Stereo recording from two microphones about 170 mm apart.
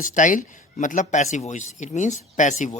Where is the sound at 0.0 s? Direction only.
50° left (ahead or behind).